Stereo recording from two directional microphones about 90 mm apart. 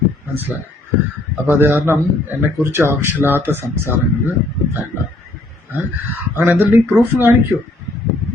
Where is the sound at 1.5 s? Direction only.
25° right (ahead or behind).